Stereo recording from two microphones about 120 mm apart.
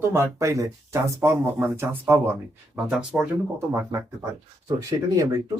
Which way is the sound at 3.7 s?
25° right (ahead or behind).